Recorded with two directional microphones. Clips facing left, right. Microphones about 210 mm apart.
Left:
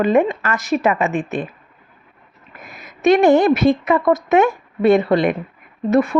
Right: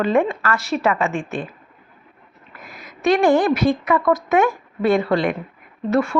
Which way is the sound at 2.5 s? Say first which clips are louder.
Left 1 dB; 20° left (ahead or behind).